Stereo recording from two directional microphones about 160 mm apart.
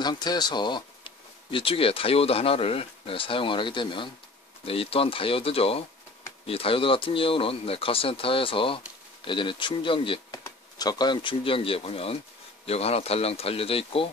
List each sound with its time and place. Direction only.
0.0 s speech: 25° left (ahead or behind)